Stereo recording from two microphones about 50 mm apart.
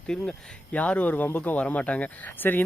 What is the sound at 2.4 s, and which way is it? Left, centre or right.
Speech, left.